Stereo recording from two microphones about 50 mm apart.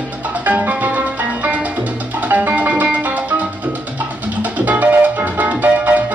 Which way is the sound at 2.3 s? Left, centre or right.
Right.